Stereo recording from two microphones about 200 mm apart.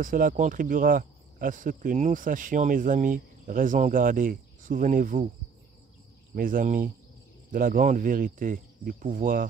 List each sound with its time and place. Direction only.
0.0 s speech: 45° right (ahead or behind)
6.3 s speech: 45° right (ahead or behind)